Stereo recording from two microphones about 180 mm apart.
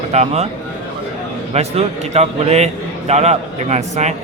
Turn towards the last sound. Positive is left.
turn(degrees=-40)  # may be behind; listen again after turning